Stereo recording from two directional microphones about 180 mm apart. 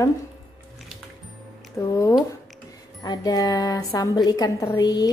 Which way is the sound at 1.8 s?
15° left (ahead or behind).